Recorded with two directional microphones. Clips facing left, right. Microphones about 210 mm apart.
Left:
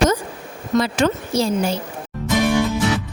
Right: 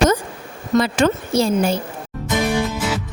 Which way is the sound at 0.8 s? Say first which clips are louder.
Right 1 dB; 55° right (ahead or behind).